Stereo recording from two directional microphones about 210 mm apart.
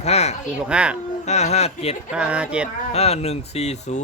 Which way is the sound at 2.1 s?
5° right (ahead or behind).